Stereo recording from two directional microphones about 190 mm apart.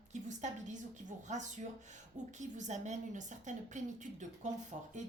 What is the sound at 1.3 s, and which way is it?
Speech, 40° right (ahead or behind).